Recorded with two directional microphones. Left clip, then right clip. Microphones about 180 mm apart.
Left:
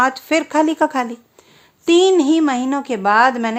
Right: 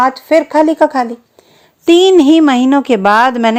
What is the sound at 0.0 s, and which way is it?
Speech, 10° right (ahead or behind).